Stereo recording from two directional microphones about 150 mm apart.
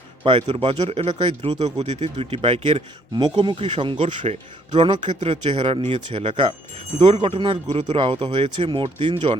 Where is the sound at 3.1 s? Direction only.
30° right (ahead or behind).